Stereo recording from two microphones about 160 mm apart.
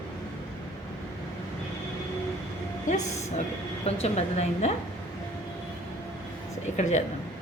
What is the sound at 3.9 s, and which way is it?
Speech, 40° left (ahead or behind).